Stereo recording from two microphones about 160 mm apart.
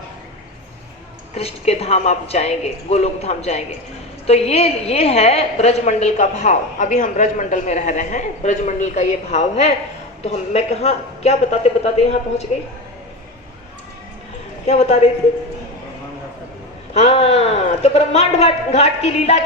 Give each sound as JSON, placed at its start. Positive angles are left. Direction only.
{"t": 1.4, "sound": "a woman's voice", "side_deg": 40}
{"t": 14.7, "sound": "speech", "side_deg": 40}
{"t": 16.9, "sound": "speech", "side_deg": 40}